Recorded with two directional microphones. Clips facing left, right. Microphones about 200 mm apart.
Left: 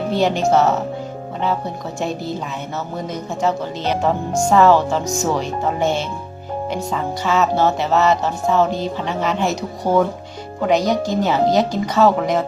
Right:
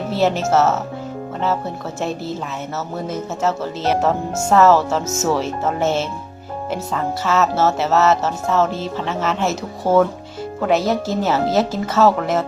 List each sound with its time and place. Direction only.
0.1 s music: 5° right (ahead or behind)
2.0 s music: centre (ahead or behind)